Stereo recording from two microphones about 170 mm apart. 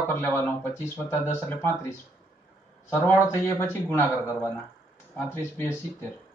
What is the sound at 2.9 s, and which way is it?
Speech, 15° left (ahead or behind).